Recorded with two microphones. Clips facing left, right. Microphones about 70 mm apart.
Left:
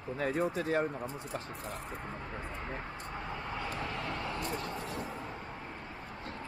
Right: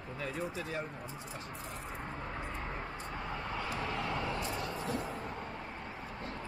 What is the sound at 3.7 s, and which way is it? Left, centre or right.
Vehicle, centre.